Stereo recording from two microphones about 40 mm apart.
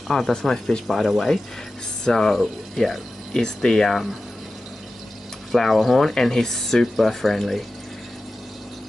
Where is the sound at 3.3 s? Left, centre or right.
Centre.